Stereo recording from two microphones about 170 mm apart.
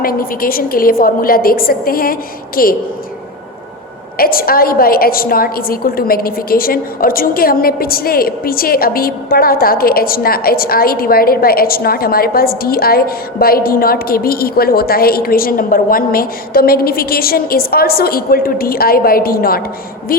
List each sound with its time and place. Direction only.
0.0 s a woman's voice: 60° left (ahead or behind)
4.2 s a woman's voice: 60° left (ahead or behind)